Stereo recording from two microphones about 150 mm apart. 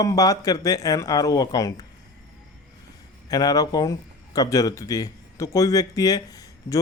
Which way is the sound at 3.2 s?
25° left (ahead or behind).